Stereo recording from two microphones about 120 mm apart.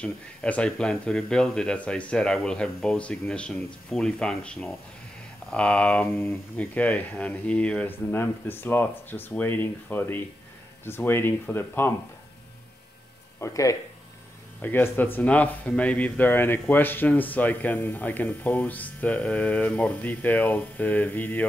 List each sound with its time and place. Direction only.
0.0 s speech: 10° left (ahead or behind)
13.4 s speech: 30° left (ahead or behind)
14.6 s speech: 15° left (ahead or behind)